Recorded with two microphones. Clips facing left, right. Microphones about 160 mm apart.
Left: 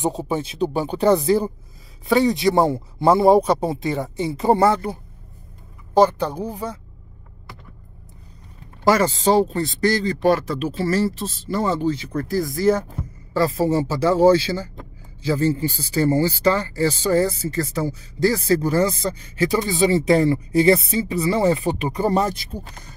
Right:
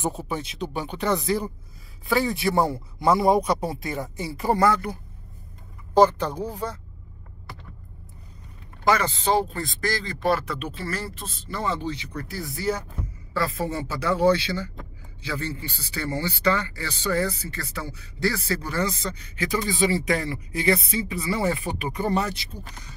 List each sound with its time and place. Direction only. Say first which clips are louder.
0.1 s speech: left 6 dB; 30° left (ahead or behind)
2.0 s a man's voice: left 6 dB; 20° left (ahead or behind)
6.2 s speech: left 3 dB; 10° left (ahead or behind)
8.8 s speech: left 5 dB; 40° left (ahead or behind); by 22.0 s 20° left (ahead or behind)
22.0 s speech: left 5 dB; 40° left (ahead or behind)